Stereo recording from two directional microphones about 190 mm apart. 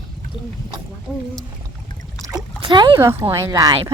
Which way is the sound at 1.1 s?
10° right (ahead or behind).